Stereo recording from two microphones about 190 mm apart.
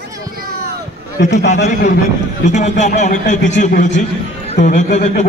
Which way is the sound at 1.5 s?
40° left (ahead or behind).